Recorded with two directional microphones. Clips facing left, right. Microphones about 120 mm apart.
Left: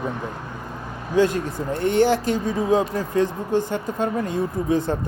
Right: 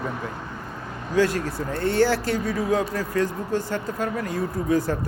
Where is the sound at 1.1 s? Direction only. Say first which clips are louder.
Left 2 dB; 20° left (ahead or behind).